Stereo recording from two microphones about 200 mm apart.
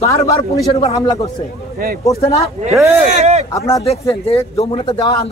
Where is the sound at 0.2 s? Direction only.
30° left (ahead or behind).